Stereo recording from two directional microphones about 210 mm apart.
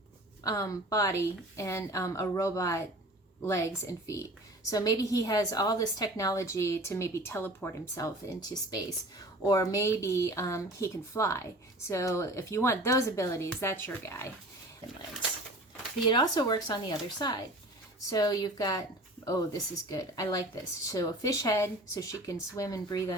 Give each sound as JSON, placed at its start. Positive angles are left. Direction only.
{"t": 0.4, "sound": "a woman's voice", "side_deg": 15}
{"t": 16.0, "sound": "a woman's voice", "side_deg": 20}